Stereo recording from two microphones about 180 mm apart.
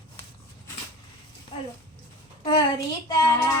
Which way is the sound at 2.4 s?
30° left (ahead or behind).